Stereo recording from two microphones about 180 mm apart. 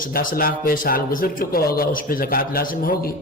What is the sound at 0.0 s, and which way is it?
A man's voice, 50° left (ahead or behind).